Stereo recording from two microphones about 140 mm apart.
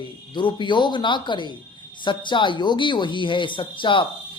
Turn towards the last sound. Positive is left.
turn(degrees=35)  # may be behind; listen again after turning